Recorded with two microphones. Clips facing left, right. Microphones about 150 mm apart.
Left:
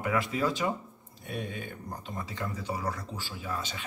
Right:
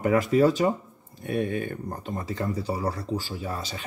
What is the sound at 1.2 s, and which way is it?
Speech, 60° right (ahead or behind).